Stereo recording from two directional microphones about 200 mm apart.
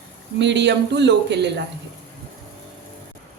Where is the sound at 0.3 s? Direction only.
60° right (ahead or behind).